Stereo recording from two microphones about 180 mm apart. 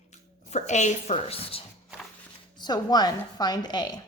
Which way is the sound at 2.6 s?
25° left (ahead or behind).